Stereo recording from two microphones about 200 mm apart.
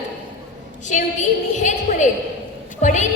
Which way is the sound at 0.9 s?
35° left (ahead or behind).